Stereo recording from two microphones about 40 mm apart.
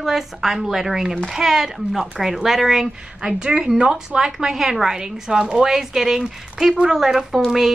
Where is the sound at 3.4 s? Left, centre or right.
Centre.